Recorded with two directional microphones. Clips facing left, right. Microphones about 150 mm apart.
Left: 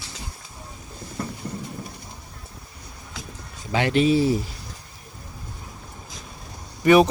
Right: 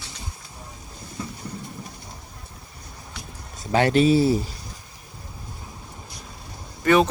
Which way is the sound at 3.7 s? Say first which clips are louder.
Right 2 dB; 40° right (ahead or behind).